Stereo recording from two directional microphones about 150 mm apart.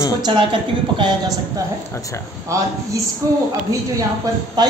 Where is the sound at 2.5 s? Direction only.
20° right (ahead or behind).